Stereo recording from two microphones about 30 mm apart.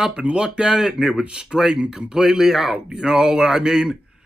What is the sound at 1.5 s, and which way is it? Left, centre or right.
Speech, right.